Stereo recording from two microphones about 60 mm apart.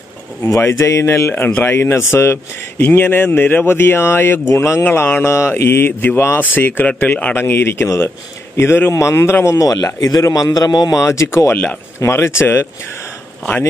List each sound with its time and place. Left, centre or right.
0.4 s speech: left
1.3 s speech: left
2.8 s speech: left
4.8 s speech: left
5.2 s speech: left
7.3 s speech: left
9.6 s speech: left
10.3 s a man's voice: left
11.0 s speech: left
11.5 s speech: left
12.0 s speech: left